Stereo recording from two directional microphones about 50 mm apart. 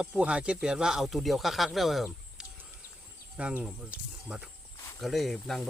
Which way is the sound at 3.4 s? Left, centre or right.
Right.